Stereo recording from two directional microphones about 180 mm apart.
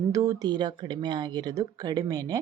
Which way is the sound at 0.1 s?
20° right (ahead or behind).